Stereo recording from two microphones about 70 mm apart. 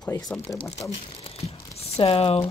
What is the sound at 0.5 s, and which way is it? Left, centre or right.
Speech, left.